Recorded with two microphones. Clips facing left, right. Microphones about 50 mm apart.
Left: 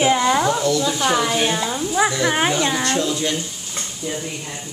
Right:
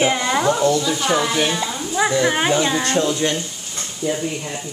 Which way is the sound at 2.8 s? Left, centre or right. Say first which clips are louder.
Right 2 dB; right.